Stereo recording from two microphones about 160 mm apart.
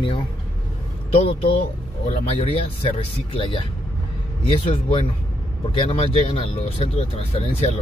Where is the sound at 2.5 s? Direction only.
35° left (ahead or behind).